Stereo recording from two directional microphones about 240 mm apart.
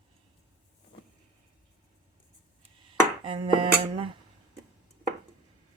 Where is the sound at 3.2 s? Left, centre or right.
Right.